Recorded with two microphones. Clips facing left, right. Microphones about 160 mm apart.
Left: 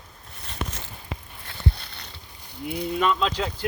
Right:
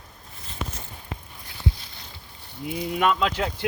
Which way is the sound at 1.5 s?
65° left (ahead or behind).